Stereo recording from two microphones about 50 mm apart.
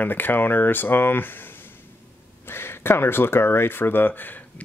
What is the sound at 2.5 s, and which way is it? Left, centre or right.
Speech, left.